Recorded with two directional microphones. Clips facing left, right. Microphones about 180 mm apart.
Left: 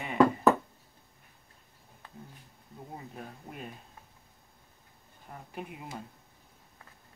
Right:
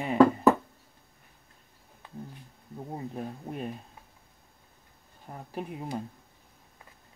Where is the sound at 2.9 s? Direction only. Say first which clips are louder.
Right 8 dB; 35° right (ahead or behind).